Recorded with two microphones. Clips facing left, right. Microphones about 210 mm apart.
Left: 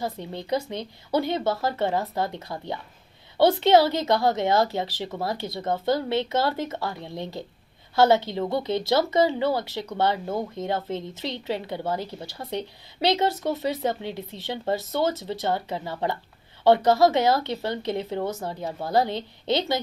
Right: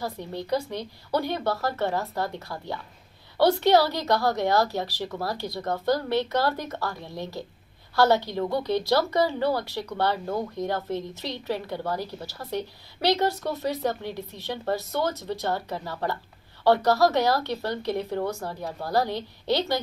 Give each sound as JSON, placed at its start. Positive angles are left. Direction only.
{"t": 0.0, "sound": "speech", "side_deg": 20}